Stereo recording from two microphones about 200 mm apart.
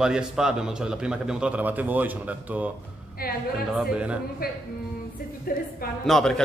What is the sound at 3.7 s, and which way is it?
Speech, 5° right (ahead or behind).